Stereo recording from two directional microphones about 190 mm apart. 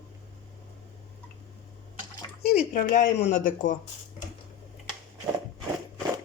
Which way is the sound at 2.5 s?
45° left (ahead or behind).